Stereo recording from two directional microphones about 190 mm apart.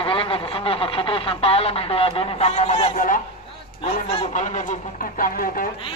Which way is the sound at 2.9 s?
45° left (ahead or behind).